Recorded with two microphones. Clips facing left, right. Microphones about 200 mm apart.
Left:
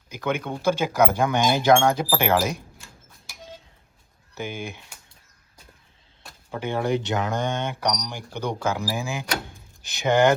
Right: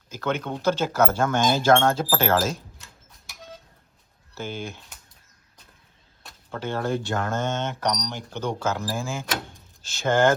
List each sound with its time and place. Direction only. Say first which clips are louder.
0.1 s speech: even; 10° left (ahead or behind)
2.7 s a sound: left 2 dB; centre (ahead or behind)
4.4 s speech: left 1 dB; 15° left (ahead or behind)
6.5 s speech: left 2 dB; 15° left (ahead or behind)